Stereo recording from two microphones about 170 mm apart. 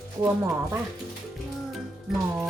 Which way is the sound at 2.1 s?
Centre (ahead or behind).